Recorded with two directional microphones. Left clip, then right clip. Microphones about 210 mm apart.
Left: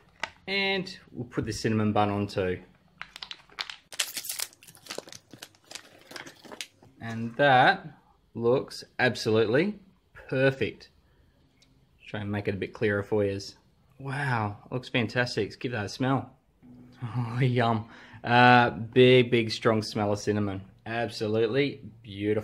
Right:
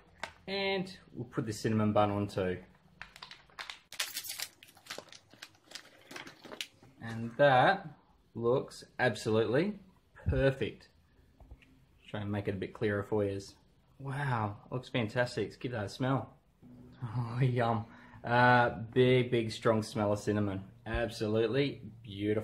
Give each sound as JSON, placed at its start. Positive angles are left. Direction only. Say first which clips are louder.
{"t": 0.5, "sound": "speech", "louder": "left 6 dB", "side_deg": 30}
{"t": 3.1, "sound": "a sound", "louder": "left 8 dB", "side_deg": 25}
{"t": 7.0, "sound": "speech", "louder": "left 2 dB", "side_deg": 30}
{"t": 12.1, "sound": "speech", "louder": "left 5 dB", "side_deg": 25}